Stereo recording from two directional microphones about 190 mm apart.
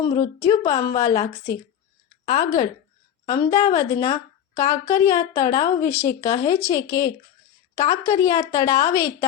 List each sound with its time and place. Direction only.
0.0 s a woman's voice: 20° left (ahead or behind)